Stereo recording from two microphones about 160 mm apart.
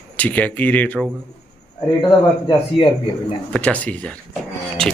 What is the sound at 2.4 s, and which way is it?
Speech, 30° left (ahead or behind).